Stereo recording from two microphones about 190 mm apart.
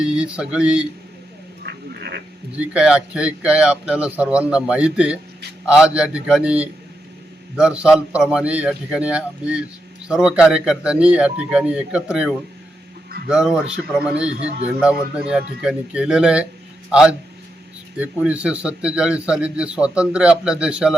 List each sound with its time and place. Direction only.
0.0 s a man's voice: 5° right (ahead or behind)
1.6 s frog: 55° right (ahead or behind)
2.6 s a man's voice: 5° right (ahead or behind)